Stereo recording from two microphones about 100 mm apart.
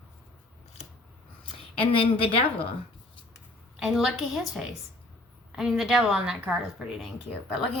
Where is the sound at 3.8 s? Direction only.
5° right (ahead or behind).